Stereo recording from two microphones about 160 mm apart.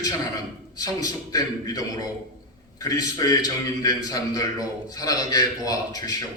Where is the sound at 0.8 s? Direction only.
20° left (ahead or behind).